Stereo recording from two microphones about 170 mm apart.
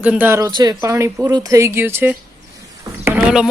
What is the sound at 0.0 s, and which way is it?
Speech, 10° right (ahead or behind).